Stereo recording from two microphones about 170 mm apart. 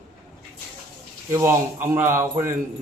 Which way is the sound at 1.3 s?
15° right (ahead or behind).